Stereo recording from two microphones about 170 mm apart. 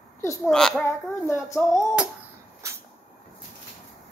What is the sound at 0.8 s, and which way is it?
Speech, 15° left (ahead or behind).